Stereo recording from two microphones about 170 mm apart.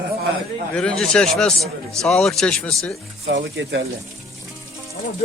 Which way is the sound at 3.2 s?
90° right.